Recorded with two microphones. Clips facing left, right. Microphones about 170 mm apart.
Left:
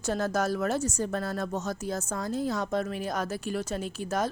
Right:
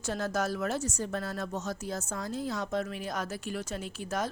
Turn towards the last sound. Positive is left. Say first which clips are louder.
# left 4 dB
turn(degrees=40)  # may be behind; listen again after turning